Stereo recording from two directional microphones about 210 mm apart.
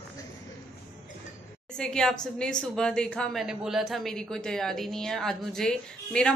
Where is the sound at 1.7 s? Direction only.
5° left (ahead or behind).